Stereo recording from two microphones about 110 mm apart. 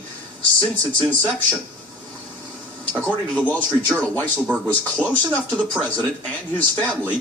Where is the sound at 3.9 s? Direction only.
15° left (ahead or behind).